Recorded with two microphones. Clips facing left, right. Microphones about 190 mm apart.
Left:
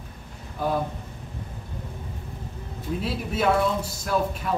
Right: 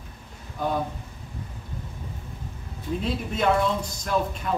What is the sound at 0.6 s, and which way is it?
Speech, 5° left (ahead or behind).